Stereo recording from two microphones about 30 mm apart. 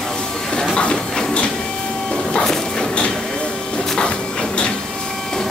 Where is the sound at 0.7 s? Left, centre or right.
Left.